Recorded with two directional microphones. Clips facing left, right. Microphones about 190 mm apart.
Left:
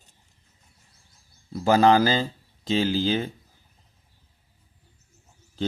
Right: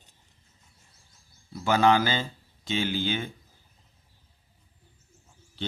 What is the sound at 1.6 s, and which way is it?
Speech, 40° left (ahead or behind).